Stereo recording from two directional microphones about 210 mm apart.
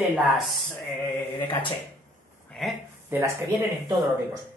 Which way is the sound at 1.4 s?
25° left (ahead or behind).